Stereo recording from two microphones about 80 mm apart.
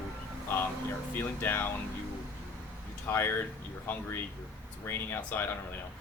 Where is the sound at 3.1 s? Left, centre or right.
Left.